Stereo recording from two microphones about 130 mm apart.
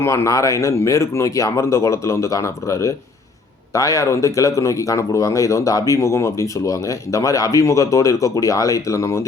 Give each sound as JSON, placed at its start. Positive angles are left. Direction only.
{"t": 0.0, "sound": "speech", "side_deg": 20}